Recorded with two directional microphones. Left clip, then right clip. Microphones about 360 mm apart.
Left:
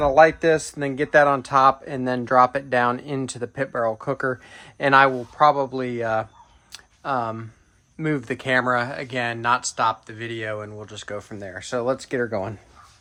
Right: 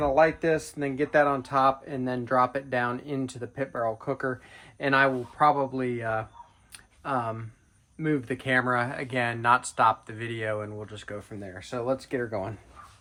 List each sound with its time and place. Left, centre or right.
0.0 s speech: left